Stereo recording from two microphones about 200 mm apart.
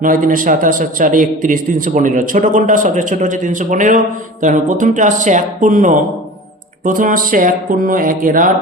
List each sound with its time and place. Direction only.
0.0 s a man's voice: 45° right (ahead or behind)